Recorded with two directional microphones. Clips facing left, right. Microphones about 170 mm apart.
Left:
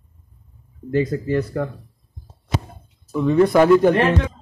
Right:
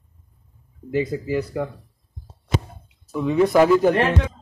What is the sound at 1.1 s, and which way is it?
Speech, 10° right (ahead or behind).